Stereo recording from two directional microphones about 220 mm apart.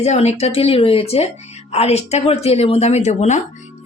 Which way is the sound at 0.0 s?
30° left (ahead or behind).